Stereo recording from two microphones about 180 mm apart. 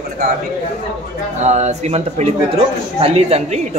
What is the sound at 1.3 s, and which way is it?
Speech, 40° right (ahead or behind).